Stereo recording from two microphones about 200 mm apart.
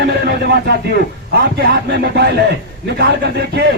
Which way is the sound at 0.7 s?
55° right (ahead or behind).